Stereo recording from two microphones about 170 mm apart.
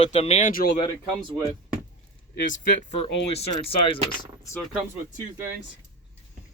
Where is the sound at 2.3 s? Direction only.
60° left (ahead or behind).